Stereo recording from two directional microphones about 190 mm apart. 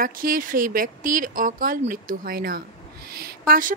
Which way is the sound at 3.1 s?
50° right (ahead or behind).